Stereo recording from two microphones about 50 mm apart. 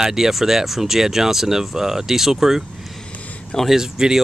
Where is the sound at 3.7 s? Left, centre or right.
Centre.